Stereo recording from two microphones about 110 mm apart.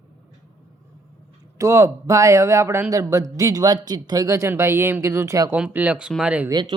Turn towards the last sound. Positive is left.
turn(degrees=-45)  # may be behind; listen again after turning